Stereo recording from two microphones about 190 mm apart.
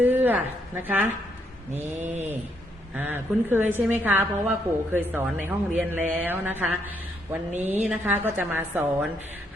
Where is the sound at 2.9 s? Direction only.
10° right (ahead or behind).